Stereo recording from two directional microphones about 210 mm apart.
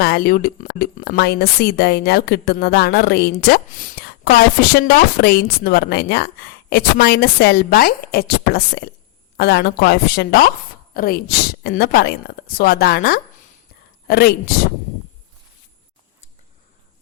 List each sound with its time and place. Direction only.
0.0 s a woman's voice: 45° left (ahead or behind)